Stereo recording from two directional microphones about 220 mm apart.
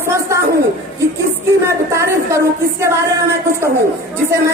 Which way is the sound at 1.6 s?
10° right (ahead or behind).